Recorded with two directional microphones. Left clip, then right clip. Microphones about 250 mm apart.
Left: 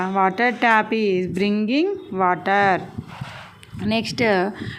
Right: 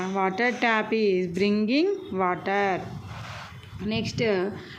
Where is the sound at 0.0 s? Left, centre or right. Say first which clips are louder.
Left 6 dB; centre.